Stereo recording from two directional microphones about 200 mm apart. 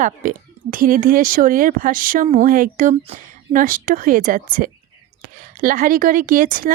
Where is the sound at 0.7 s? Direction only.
45° right (ahead or behind).